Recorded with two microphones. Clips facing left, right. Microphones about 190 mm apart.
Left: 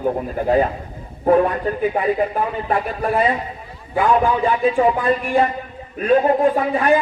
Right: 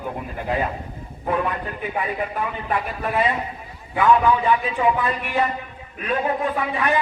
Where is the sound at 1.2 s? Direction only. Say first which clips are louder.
Left 9 dB; 40° left (ahead or behind).